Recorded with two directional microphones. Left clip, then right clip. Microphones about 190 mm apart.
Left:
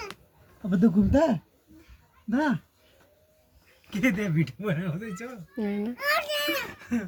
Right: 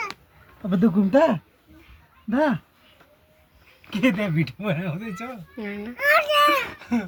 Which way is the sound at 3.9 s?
15° left (ahead or behind).